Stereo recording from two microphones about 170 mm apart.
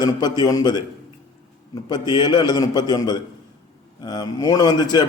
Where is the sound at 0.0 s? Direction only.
25° left (ahead or behind).